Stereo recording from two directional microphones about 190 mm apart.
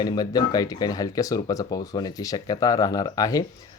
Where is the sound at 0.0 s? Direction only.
20° left (ahead or behind).